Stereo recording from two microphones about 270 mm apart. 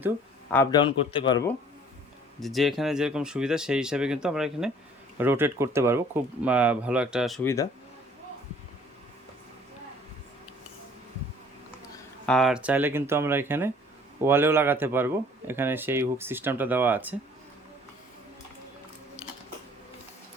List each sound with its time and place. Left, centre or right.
0.5 s a man's voice: centre
2.4 s speech: centre
12.2 s speech: centre